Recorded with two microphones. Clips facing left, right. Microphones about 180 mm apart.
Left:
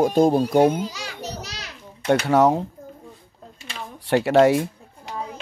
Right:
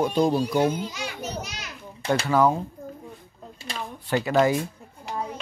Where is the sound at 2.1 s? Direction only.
70° left (ahead or behind).